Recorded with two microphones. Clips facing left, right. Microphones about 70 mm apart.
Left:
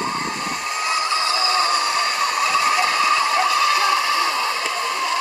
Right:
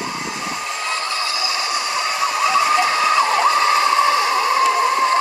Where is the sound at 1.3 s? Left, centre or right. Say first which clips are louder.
Left 4 dB; left.